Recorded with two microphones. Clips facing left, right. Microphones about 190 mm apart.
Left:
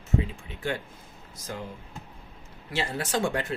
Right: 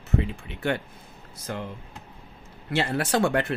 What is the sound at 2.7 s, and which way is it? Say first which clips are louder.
Speech: right 5 dB; 65° right (ahead or behind).